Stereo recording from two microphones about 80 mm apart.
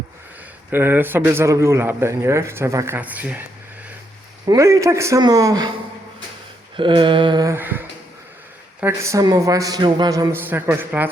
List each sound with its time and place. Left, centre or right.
0.7 s a man's voice: right
3.0 s a man's voice: centre
4.4 s a man's voice: right
5.2 s speech: right
6.7 s a sound: right
7.6 s a man's voice: right
9.4 s speech: right
10.3 s a man's voice: right